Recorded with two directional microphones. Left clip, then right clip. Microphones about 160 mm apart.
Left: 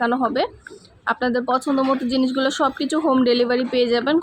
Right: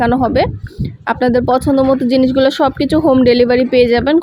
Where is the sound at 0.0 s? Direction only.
35° right (ahead or behind).